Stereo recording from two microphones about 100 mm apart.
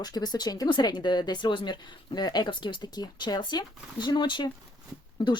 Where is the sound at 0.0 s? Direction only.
45° left (ahead or behind).